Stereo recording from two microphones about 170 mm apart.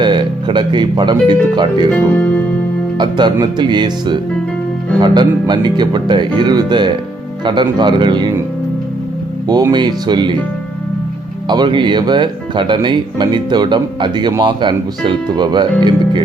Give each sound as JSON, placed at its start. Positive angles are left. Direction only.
{"t": 0.0, "sound": "speech", "side_deg": -25}
{"t": 1.9, "sound": "speech", "side_deg": 10}
{"t": 3.0, "sound": "speech", "side_deg": -25}
{"t": 9.5, "sound": "speech", "side_deg": -25}
{"t": 11.4, "sound": "speech", "side_deg": -25}